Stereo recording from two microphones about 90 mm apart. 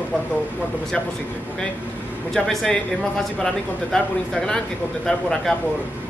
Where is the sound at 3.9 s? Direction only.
10° left (ahead or behind).